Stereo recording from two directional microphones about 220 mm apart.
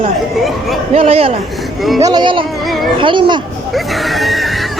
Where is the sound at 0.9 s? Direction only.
25° right (ahead or behind).